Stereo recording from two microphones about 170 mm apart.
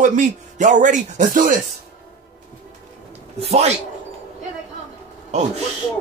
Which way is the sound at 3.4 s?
40° right (ahead or behind).